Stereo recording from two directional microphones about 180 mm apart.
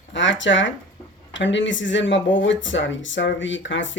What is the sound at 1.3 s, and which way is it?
Speech, 90° left.